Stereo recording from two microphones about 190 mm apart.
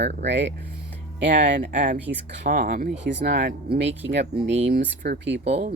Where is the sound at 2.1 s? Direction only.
70° right (ahead or behind).